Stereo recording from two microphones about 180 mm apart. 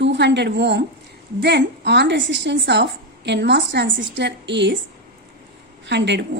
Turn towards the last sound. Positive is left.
turn(degrees=-75)  # may be behind; listen again after turning